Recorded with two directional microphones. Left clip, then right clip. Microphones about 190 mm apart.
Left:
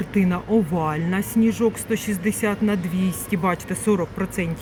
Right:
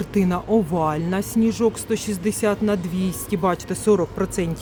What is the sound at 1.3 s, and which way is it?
Speech, 30° right (ahead or behind).